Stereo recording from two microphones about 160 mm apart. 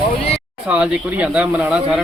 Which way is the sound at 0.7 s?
5° right (ahead or behind).